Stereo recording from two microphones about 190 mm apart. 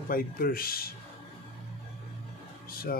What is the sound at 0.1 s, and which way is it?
Speech, 50° left (ahead or behind).